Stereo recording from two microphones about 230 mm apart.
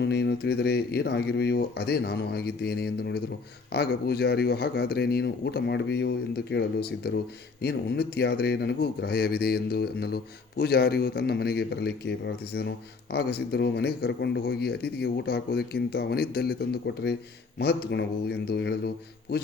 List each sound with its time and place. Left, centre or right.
0.0 s speech: left